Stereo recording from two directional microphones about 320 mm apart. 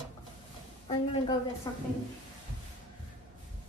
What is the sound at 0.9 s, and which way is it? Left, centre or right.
Speech, centre.